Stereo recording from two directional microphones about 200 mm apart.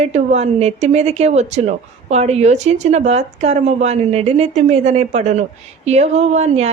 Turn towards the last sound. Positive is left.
turn(degrees=-35)  # may be behind; listen again after turning